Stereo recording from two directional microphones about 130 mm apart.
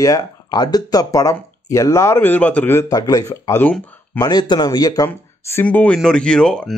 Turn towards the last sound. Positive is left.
turn(degrees=5)  # may be behind; listen again after turning